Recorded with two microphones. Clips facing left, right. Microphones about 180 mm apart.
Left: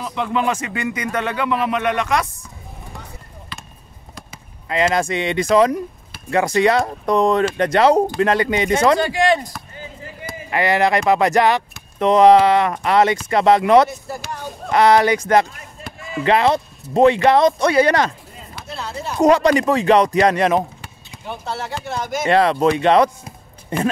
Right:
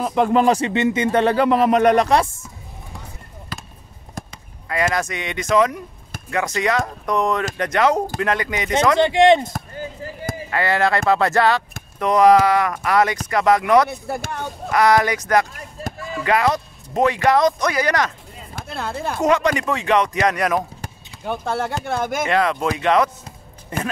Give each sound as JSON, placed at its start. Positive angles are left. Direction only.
{"t": 0.0, "sound": "speech", "side_deg": -45}
{"t": 3.5, "sound": "basketball bounce", "side_deg": -40}
{"t": 4.9, "sound": "speech", "side_deg": 30}
{"t": 9.0, "sound": "speech", "side_deg": -20}
{"t": 9.5, "sound": "chop", "side_deg": -45}
{"t": 10.5, "sound": "speech", "side_deg": 15}
{"t": 13.8, "sound": "speech", "side_deg": -60}
{"t": 14.7, "sound": "speech", "side_deg": 30}
{"t": 15.8, "sound": "chop", "side_deg": -40}
{"t": 16.3, "sound": "speech", "side_deg": 25}
{"t": 18.5, "sound": "chop", "side_deg": -50}
{"t": 19.2, "sound": "speech", "side_deg": 35}
{"t": 20.8, "sound": "speech", "side_deg": -50}
{"t": 22.3, "sound": "speech", "side_deg": 35}